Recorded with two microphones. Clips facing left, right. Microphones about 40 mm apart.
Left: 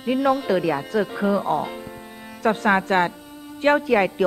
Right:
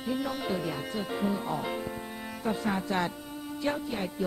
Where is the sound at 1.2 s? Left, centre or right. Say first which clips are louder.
Left 7 dB; left.